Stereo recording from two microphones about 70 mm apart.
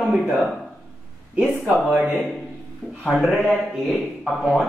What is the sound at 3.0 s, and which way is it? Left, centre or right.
Speech, centre.